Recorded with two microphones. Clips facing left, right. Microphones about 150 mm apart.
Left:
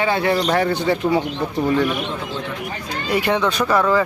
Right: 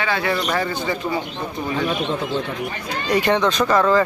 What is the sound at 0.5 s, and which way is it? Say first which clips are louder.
Speech: left 4 dB; 65° left (ahead or behind).